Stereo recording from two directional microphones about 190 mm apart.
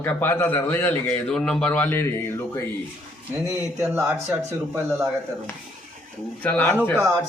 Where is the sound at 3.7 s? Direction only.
10° right (ahead or behind).